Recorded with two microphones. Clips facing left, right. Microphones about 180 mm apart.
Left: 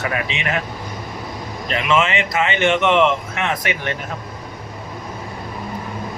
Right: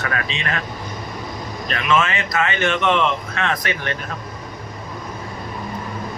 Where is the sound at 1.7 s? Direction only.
20° left (ahead or behind).